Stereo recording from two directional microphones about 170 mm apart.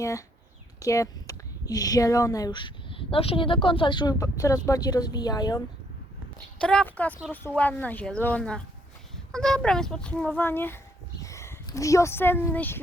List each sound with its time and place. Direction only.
0.0 s speech: 20° left (ahead or behind)
6.6 s a child's voice: 5° left (ahead or behind)